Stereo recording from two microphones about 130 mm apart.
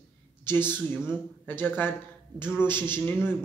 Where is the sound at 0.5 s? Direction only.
15° left (ahead or behind).